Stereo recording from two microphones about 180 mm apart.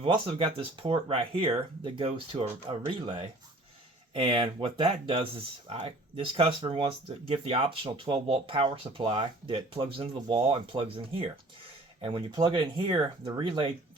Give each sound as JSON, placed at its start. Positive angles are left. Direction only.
{"t": 0.0, "sound": "speech", "side_deg": -30}